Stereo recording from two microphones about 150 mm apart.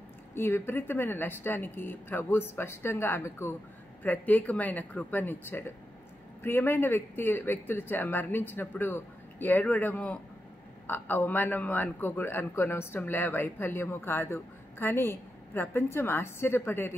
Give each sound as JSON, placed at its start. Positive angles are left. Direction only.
{"t": 0.3, "sound": "a man's voice", "side_deg": 15}